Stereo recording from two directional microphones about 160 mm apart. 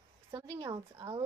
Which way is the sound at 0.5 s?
25° right (ahead or behind).